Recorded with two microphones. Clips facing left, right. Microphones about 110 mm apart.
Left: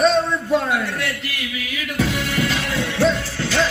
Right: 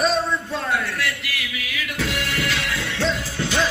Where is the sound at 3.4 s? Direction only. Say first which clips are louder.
Right 1 dB; 15° right (ahead or behind).